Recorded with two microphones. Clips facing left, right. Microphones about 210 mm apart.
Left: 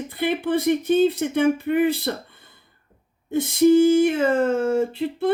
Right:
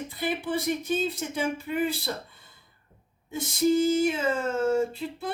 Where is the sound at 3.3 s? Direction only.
60° left (ahead or behind).